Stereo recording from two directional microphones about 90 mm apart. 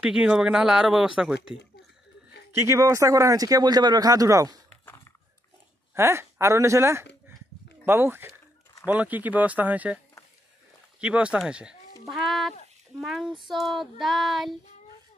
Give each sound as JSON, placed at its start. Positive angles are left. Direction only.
{"t": 0.0, "sound": "speech", "side_deg": -10}
{"t": 2.5, "sound": "speech", "side_deg": -30}
{"t": 5.9, "sound": "speech", "side_deg": -30}
{"t": 11.0, "sound": "speech", "side_deg": -10}
{"t": 12.1, "sound": "child singing", "side_deg": 0}